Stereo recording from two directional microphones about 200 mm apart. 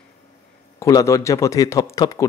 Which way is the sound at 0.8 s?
15° left (ahead or behind).